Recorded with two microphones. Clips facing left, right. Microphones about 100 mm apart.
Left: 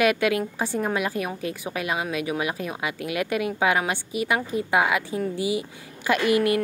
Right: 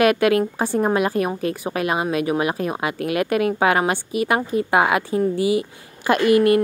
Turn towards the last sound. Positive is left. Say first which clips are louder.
# right 6 dB
turn(degrees=-45)  # may be behind; listen again after turning